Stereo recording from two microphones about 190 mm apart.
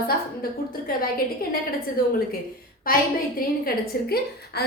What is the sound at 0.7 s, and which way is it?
Speech, 50° left (ahead or behind).